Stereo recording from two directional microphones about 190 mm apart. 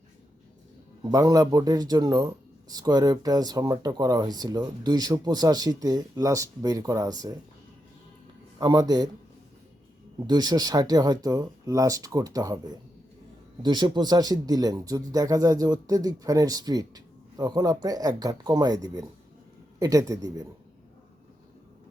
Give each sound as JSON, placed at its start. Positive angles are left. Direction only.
{"t": 1.0, "sound": "speech", "side_deg": -20}
{"t": 8.5, "sound": "speech", "side_deg": -20}
{"t": 10.2, "sound": "speech", "side_deg": -20}